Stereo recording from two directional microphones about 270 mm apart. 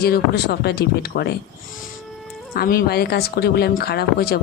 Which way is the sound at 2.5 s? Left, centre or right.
Left.